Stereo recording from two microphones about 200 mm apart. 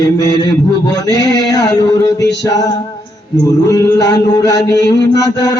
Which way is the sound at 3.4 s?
15° left (ahead or behind).